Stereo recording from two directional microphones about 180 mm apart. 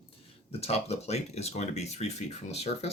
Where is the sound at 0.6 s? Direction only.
35° left (ahead or behind).